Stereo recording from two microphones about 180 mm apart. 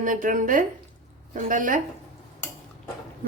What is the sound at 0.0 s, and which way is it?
A woman's voice, 50° right (ahead or behind).